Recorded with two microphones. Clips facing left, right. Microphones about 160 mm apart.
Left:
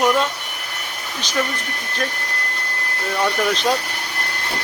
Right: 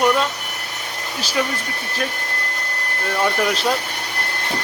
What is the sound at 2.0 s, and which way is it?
Speech, 5° right (ahead or behind).